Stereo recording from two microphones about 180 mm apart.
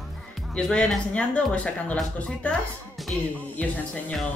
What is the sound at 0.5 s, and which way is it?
Speech, 5° left (ahead or behind).